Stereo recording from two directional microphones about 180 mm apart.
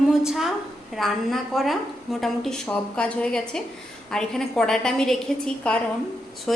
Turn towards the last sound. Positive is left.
turn(degrees=5)  # may be behind; listen again after turning